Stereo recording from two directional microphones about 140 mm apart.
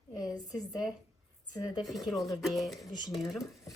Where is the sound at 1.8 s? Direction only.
Centre (ahead or behind).